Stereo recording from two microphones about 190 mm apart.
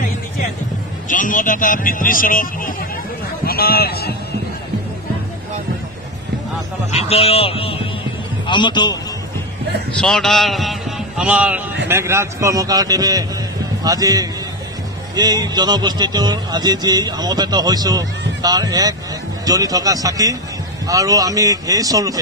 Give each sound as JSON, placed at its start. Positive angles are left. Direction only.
{"t": 1.0, "sound": "a man's voice", "side_deg": 45}
{"t": 6.9, "sound": "a man's voice", "side_deg": 35}
{"t": 9.9, "sound": "a man's voice", "side_deg": 5}